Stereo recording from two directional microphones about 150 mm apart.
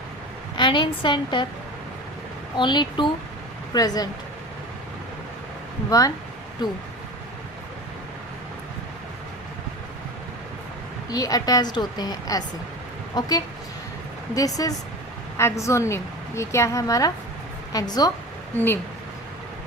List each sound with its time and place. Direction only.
0.5 s a woman's voice: 30° left (ahead or behind)
2.6 s speech: 30° left (ahead or behind)
5.9 s a woman's voice: 25° left (ahead or behind)
11.1 s a woman's voice: 25° left (ahead or behind)